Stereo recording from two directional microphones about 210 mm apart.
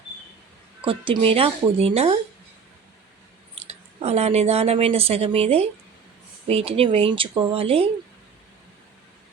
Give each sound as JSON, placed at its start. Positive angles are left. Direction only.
{"t": 0.9, "sound": "speech", "side_deg": -25}
{"t": 3.5, "sound": "speech", "side_deg": -30}